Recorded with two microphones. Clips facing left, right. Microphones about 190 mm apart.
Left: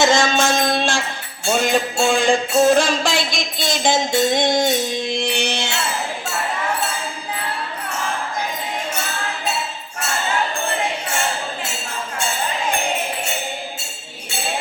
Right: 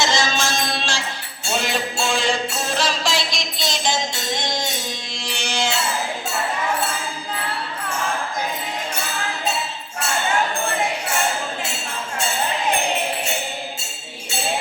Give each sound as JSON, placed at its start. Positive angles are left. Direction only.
{"t": 0.0, "sound": "music", "side_deg": 55}